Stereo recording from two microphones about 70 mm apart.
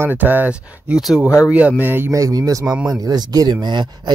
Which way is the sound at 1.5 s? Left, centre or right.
Centre.